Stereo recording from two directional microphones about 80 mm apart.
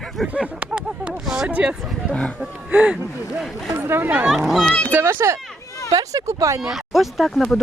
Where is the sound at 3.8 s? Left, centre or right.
Right.